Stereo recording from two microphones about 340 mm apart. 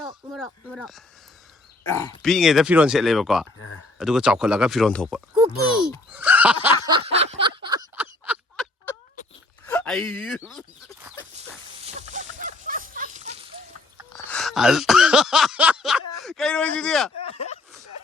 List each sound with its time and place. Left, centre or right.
0.3 s speech: centre
6.1 s snicker: centre
6.8 s a sound: centre
9.6 s chicken: centre
11.3 s a sound: centre
14.1 s speech: centre
17.2 s speech: centre